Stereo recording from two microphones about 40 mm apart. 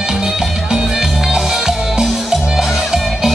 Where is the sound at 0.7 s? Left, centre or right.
Centre.